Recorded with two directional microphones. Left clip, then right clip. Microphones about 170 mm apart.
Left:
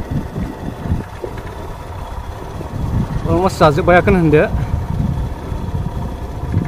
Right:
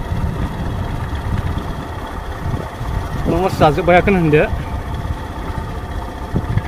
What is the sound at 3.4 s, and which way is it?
Speech, 25° left (ahead or behind).